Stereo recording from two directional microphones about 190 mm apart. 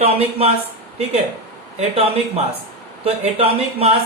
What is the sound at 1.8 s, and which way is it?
Speech, 30° right (ahead or behind).